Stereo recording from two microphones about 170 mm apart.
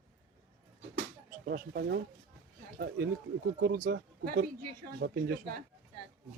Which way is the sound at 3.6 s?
60° right (ahead or behind).